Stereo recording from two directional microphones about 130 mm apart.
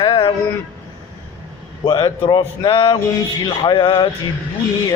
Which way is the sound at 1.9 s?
35° left (ahead or behind).